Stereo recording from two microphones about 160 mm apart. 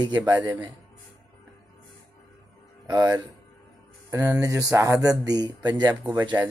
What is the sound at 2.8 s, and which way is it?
Speech, 25° right (ahead or behind).